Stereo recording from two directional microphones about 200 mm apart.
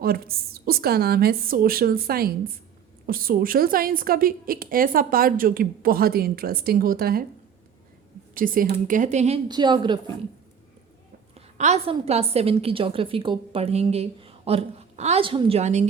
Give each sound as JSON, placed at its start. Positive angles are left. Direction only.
{"t": 0.0, "sound": "a woman's voice", "side_deg": -50}
{"t": 8.4, "sound": "speech", "side_deg": -45}
{"t": 9.5, "sound": "a woman's voice", "side_deg": -20}
{"t": 11.3, "sound": "a sound", "side_deg": -35}
{"t": 11.9, "sound": "a woman's voice", "side_deg": -30}